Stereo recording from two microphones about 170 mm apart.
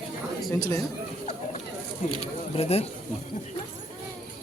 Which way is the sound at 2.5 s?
35° left (ahead or behind).